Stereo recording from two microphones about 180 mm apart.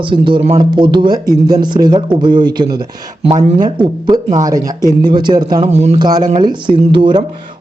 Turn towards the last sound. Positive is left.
turn(degrees=-25)  # may be behind; listen again after turning